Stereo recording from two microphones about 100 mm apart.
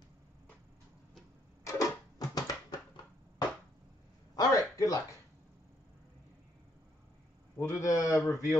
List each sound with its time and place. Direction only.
1.6 s music: 35° left (ahead or behind)
4.4 s a sound: 35° left (ahead or behind)
7.5 s speech: 30° left (ahead or behind)